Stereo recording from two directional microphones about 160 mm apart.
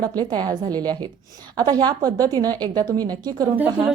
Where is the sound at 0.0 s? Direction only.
25° right (ahead or behind).